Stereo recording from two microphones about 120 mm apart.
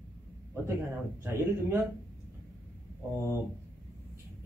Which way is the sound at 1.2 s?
20° right (ahead or behind).